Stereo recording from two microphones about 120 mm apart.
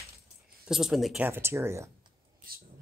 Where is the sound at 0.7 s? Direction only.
5° right (ahead or behind).